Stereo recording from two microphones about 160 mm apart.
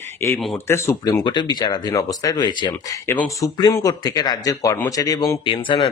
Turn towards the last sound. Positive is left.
turn(degrees=30)  # may be behind; listen again after turning